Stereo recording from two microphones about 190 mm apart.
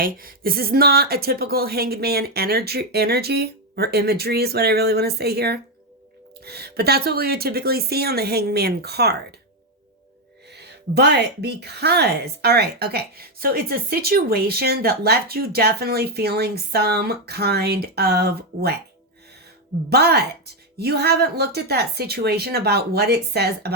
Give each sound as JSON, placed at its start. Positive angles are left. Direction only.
{"t": 0.0, "sound": "speech", "side_deg": -50}
{"t": 10.5, "sound": "speech", "side_deg": -60}
{"t": 19.9, "sound": "speech", "side_deg": -60}